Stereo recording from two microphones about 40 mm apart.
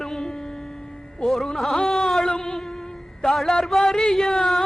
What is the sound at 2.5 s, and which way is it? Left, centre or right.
Music, centre.